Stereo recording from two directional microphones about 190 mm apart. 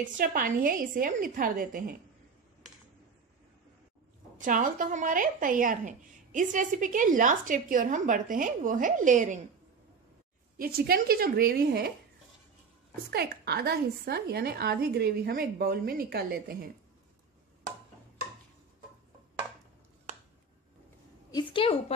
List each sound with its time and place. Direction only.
0.0 s a woman's voice: 45° right (ahead or behind)
4.4 s a woman's voice: 45° right (ahead or behind)
10.6 s a woman's voice: 55° right (ahead or behind)
13.1 s a woman's voice: 55° right (ahead or behind)
21.3 s a woman's voice: 25° left (ahead or behind)